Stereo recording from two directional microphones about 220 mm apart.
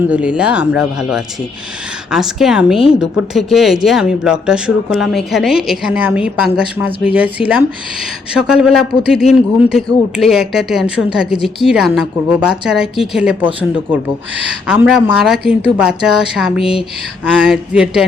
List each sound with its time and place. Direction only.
0.1 s speech: 5° right (ahead or behind)